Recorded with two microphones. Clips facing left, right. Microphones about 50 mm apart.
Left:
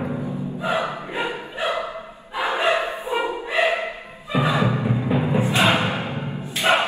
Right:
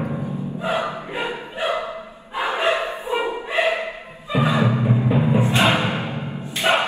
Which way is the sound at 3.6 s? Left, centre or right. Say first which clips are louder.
Even; left.